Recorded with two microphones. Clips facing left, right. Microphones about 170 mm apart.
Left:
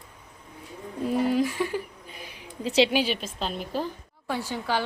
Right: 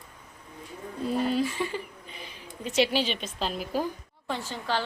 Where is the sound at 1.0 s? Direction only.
15° left (ahead or behind).